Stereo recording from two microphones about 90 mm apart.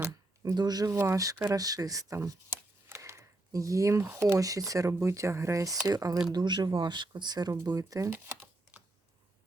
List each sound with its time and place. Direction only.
0.5 s speech: 45° right (ahead or behind)
0.9 s speech: 30° right (ahead or behind)
2.5 s a sound: 30° right (ahead or behind)
4.4 s speech: 40° right (ahead or behind)
7.5 s speech: 40° right (ahead or behind)
8.1 s a sound: 25° right (ahead or behind)